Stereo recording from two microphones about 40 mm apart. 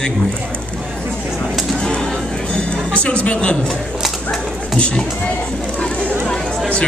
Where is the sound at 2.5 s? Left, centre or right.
Left.